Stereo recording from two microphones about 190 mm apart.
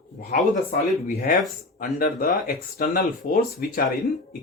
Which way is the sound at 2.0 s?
50° left (ahead or behind).